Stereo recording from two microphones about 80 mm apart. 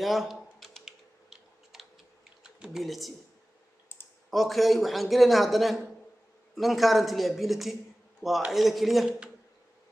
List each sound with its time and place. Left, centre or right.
0.0 s typing: centre
2.4 s speech: centre
3.9 s clicking: left
4.3 s a man's voice: centre